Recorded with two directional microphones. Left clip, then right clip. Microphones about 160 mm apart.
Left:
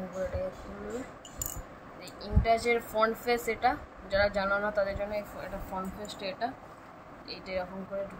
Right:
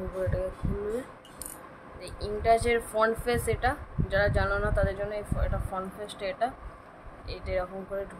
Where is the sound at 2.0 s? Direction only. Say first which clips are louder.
Right 5 dB; 30° right (ahead or behind).